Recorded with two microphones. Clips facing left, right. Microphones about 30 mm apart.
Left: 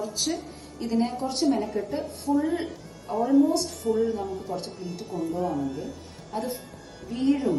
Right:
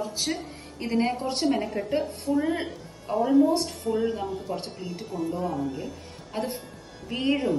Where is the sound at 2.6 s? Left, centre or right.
Centre.